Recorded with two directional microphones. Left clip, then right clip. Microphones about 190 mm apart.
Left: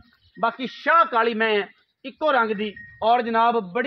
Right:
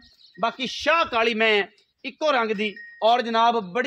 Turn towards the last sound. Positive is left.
turn(degrees=-40)  # may be behind; listen again after turning